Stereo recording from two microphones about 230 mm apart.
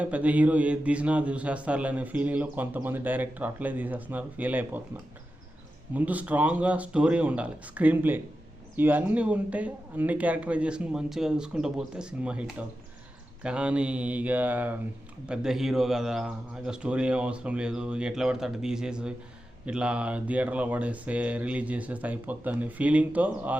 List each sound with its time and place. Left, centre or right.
0.0 s a man's voice: centre
5.9 s a man's voice: centre